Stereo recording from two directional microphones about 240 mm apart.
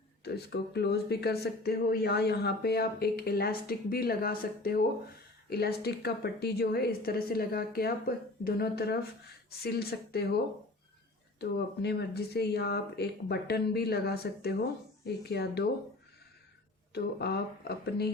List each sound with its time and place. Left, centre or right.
0.3 s speech: left
16.9 s speech: left